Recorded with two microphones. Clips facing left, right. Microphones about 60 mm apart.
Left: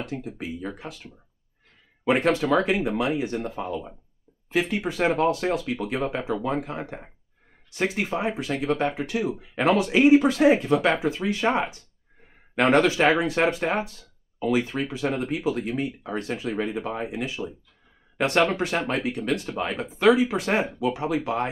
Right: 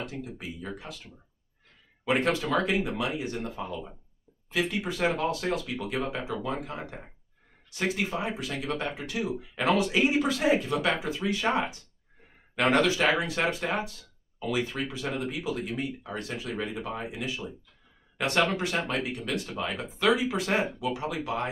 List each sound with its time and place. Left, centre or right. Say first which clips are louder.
0.2 s speech: left 5 dB; left
2.0 s speech: left 5 dB; left
15.0 s speech: left 8 dB; left
18.1 s a sound: left 5 dB; left
18.6 s speech: left 4 dB; left